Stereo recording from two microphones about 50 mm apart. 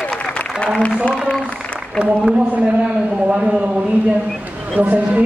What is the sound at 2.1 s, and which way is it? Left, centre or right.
A man's voice, right.